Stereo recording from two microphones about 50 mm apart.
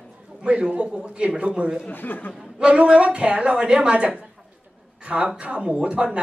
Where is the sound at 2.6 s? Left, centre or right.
Right.